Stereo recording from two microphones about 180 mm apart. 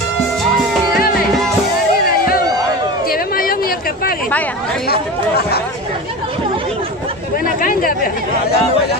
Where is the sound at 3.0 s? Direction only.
55° left (ahead or behind).